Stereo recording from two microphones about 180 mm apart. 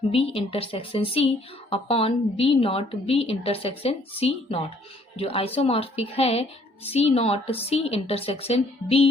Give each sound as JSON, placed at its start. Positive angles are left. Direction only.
{"t": 0.1, "sound": "a woman's voice", "side_deg": 30}